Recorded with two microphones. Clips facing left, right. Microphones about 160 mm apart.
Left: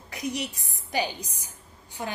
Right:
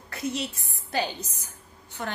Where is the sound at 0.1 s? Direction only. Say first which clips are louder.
Right 1 dB; 15° left (ahead or behind).